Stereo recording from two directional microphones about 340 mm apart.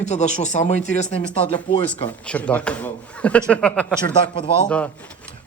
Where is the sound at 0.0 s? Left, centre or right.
Centre.